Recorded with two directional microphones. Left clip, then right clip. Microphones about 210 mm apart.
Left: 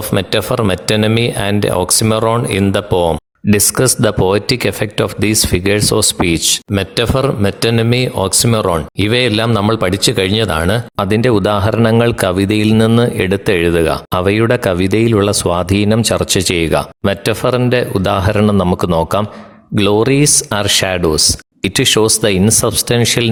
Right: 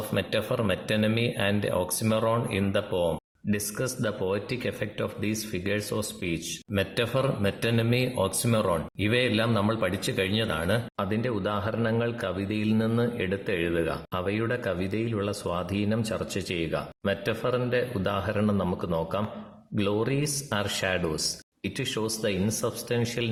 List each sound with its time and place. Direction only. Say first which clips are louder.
0.1 s speech: left 13 dB; 45° left (ahead or behind)